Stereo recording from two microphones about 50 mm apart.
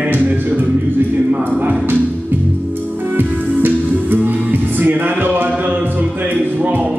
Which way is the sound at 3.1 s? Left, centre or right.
Right.